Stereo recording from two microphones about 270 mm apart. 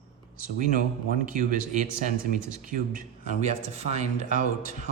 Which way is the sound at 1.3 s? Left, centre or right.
Right.